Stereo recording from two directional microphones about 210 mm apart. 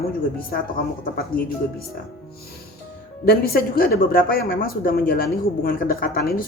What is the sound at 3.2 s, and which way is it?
Speech, 45° left (ahead or behind).